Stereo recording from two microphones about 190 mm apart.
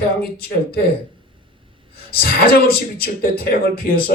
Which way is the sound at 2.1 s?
50° left (ahead or behind).